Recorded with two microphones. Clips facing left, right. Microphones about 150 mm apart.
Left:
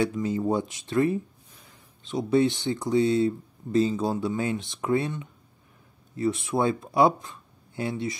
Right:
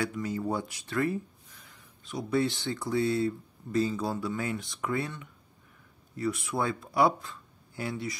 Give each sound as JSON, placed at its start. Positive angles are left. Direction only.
{"t": 0.0, "sound": "speech", "side_deg": 25}